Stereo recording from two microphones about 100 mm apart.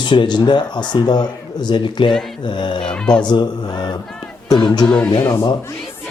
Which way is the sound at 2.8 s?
10° left (ahead or behind).